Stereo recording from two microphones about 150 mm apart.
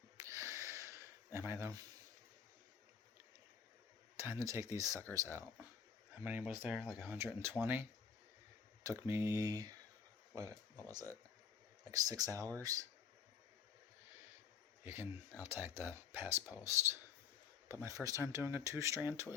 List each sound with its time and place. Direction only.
0.2 s a sound: 20° right (ahead or behind)
4.2 s speech: 20° right (ahead or behind)
6.1 s speech: 10° right (ahead or behind)
14.8 s speech: 15° right (ahead or behind)